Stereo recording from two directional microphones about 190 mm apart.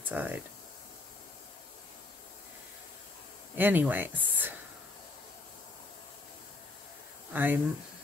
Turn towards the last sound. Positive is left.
turn(degrees=-10)  # may be behind; listen again after turning